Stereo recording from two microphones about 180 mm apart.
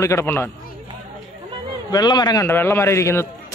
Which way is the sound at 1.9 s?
20° left (ahead or behind).